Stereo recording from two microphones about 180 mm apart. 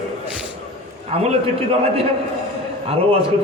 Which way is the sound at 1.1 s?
30° right (ahead or behind).